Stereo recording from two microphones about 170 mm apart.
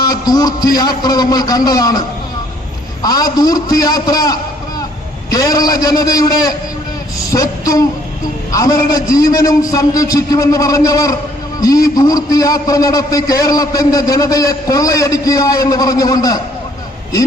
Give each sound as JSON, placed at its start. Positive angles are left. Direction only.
{"t": 0.0, "sound": "a man's voice", "side_deg": 20}
{"t": 3.0, "sound": "a man's voice", "side_deg": 20}